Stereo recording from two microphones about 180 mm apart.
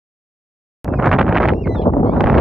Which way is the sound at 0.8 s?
Centre (ahead or behind).